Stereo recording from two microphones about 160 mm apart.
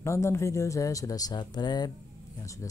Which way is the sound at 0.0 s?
15° left (ahead or behind).